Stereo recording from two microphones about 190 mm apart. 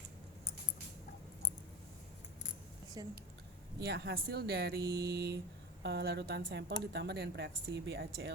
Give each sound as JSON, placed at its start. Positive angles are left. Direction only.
{"t": 3.0, "sound": "speech", "side_deg": -20}
{"t": 3.8, "sound": "a woman's voice", "side_deg": -60}